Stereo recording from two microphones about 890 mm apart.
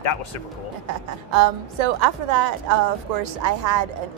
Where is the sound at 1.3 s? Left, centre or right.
Right.